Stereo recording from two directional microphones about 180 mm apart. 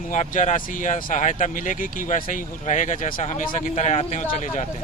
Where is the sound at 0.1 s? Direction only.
45° left (ahead or behind).